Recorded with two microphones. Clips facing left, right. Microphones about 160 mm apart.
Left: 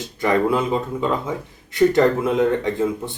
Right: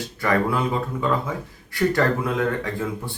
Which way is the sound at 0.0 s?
20° left (ahead or behind).